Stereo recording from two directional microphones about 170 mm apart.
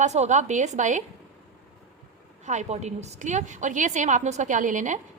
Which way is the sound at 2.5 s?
45° right (ahead or behind).